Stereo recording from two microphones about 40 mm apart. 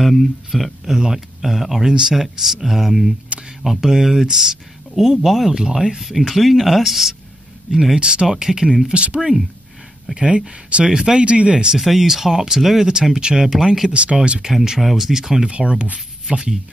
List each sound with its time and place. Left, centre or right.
0.0 s speech: centre
3.3 s speech: right
3.6 s speech: centre
5.5 s speech: centre
5.9 s speech: centre
8.8 s speech: right
11.2 s speech: right
11.5 s speech: centre
13.2 s speech: right
14.4 s speech: centre
15.5 s speech: right